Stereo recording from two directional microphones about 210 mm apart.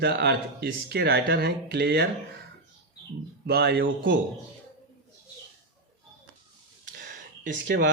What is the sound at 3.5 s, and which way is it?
Speech, 50° right (ahead or behind).